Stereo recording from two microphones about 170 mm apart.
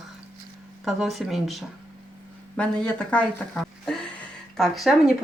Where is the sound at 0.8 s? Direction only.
Centre (ahead or behind).